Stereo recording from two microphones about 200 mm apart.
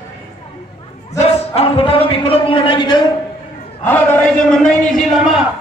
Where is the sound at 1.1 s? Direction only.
35° left (ahead or behind).